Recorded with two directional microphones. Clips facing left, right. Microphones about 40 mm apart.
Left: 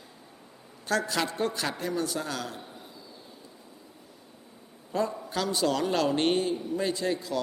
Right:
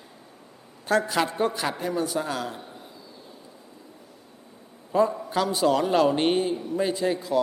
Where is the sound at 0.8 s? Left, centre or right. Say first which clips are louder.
Right 5 dB; centre.